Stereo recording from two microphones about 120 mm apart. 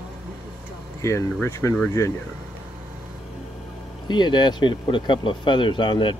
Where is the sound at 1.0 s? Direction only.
25° left (ahead or behind).